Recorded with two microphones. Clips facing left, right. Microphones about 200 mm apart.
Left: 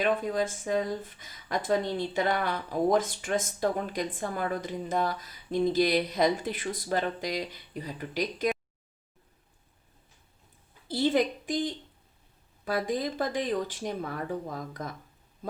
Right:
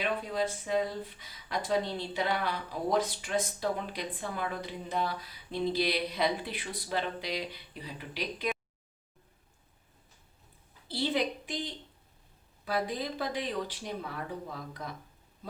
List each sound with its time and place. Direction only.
0.0 s speech: 45° left (ahead or behind)
10.8 s a sound: 45° left (ahead or behind)
12.6 s speech: 45° left (ahead or behind)